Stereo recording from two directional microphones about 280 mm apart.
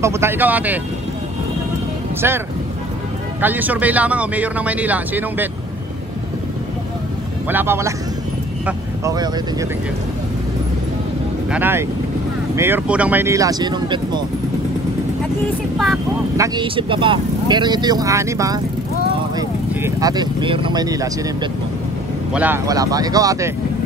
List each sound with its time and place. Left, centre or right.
0.0 s speech: centre
2.2 s speech: centre
7.4 s speech: centre
11.5 s speech: centre
16.3 s speech: centre